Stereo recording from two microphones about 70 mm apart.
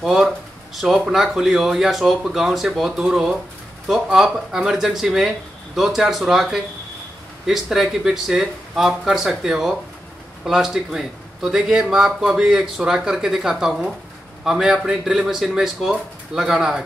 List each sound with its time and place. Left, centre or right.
0.0 s speech: centre